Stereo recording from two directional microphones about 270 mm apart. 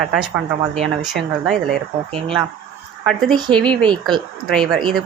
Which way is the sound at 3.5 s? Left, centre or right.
Centre.